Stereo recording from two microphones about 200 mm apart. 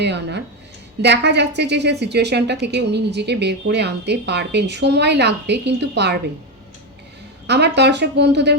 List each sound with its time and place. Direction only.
0.0 s a woman's voice: 60° right (ahead or behind)
7.4 s a woman's voice: 55° right (ahead or behind)